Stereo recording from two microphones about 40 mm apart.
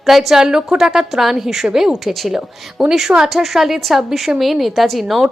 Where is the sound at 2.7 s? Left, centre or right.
Centre.